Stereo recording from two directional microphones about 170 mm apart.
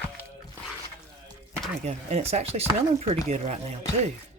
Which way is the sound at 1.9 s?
40° right (ahead or behind).